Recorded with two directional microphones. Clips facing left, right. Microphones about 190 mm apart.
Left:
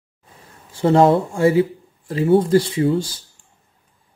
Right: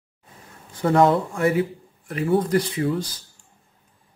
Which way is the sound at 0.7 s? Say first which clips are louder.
Left 4 dB; 25° left (ahead or behind).